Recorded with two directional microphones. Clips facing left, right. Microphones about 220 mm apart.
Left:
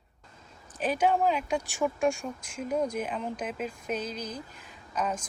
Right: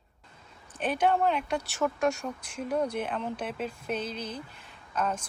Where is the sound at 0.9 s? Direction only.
10° left (ahead or behind).